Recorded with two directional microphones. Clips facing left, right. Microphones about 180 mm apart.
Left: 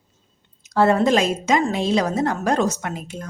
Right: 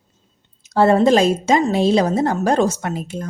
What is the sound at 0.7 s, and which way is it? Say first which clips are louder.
Speech: right 4 dB; 30° right (ahead or behind).